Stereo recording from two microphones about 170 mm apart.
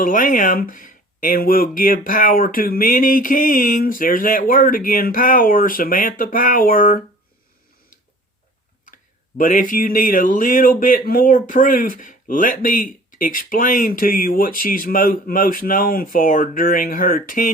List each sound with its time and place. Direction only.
0.0 s speech: 55° left (ahead or behind)
9.4 s speech: 50° left (ahead or behind)